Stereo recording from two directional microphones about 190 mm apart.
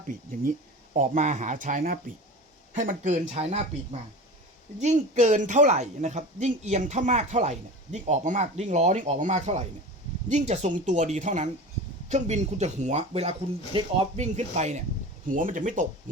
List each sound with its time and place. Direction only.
0.1 s a woman's voice: 45° right (ahead or behind)
4.8 s a woman's voice: 40° right (ahead or behind)